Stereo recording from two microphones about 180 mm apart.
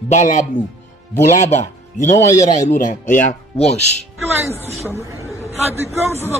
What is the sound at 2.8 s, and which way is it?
Speech, 45° left (ahead or behind).